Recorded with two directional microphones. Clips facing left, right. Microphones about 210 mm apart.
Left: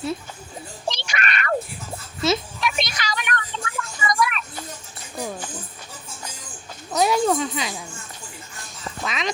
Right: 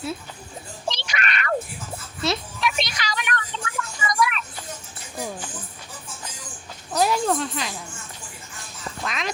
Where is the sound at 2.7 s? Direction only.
45° left (ahead or behind).